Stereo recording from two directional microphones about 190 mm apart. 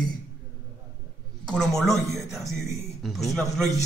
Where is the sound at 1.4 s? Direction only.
5° left (ahead or behind).